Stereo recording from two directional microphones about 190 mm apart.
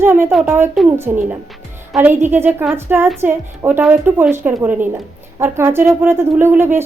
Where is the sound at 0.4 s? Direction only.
10° right (ahead or behind).